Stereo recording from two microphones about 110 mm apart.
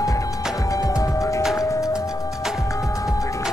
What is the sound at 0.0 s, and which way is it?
Music, 30° left (ahead or behind).